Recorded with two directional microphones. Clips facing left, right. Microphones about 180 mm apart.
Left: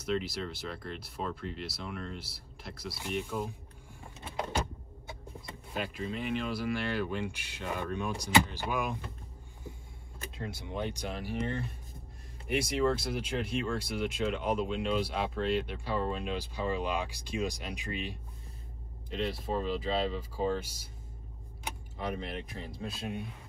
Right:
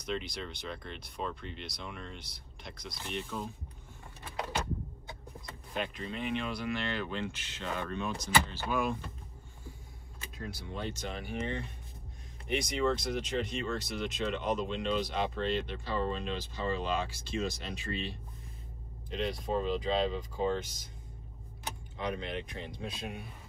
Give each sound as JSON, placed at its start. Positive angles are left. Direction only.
{"t": 0.0, "sound": "speech", "side_deg": 5}
{"t": 5.7, "sound": "speech", "side_deg": 5}
{"t": 10.3, "sound": "speech", "side_deg": 25}
{"t": 11.1, "sound": "speech", "side_deg": 0}
{"t": 19.0, "sound": "speech", "side_deg": 0}
{"t": 21.9, "sound": "speech", "side_deg": 5}